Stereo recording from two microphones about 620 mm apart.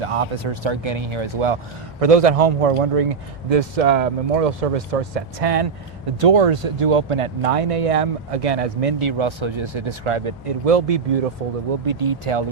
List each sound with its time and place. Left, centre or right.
0.0 s speech: right
2.0 s speech: right
3.5 s speech: right
11.9 s speech: right